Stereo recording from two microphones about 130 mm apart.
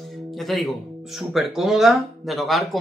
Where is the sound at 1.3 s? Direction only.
Centre (ahead or behind).